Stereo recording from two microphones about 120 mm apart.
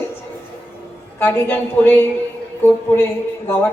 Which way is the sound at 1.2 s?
15° left (ahead or behind).